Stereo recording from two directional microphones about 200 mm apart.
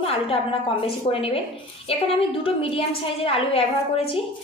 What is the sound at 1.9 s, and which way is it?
A woman's voice, 30° left (ahead or behind).